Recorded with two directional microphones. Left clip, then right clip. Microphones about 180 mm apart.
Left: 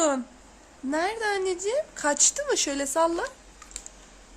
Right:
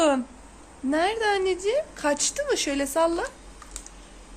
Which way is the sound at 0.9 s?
10° left (ahead or behind).